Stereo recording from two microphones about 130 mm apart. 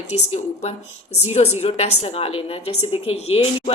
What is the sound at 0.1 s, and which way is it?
Speech, 55° left (ahead or behind).